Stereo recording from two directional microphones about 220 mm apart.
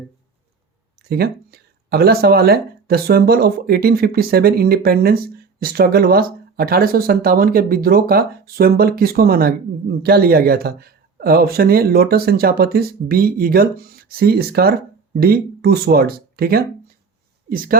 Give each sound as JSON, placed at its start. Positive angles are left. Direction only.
{"t": 1.1, "sound": "speech", "side_deg": -45}